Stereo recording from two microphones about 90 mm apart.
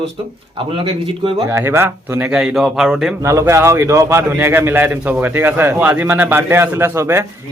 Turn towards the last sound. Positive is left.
turn(degrees=-30)  # may be behind; listen again after turning